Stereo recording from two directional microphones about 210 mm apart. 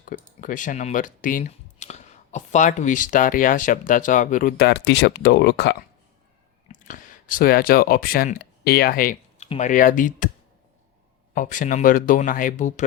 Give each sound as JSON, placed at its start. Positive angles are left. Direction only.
{"t": 0.1, "sound": "speech", "side_deg": 40}
{"t": 6.7, "sound": "speech", "side_deg": 40}
{"t": 11.3, "sound": "speech", "side_deg": 40}